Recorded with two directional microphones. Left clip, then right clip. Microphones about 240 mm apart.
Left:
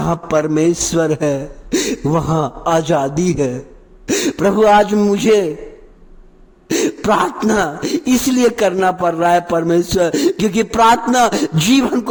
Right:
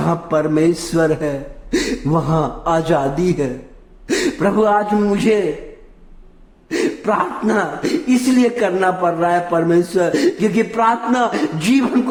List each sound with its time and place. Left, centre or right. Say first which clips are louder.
0.0 s a man's voice: left 1 dB; left
6.7 s speech: left 3 dB; left